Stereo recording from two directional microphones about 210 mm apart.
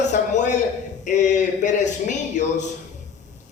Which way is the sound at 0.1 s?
35° left (ahead or behind).